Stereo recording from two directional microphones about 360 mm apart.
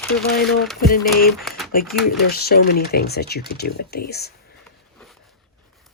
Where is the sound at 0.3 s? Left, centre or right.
Left.